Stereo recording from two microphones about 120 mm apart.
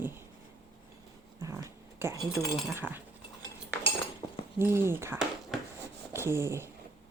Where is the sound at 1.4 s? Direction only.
25° right (ahead or behind).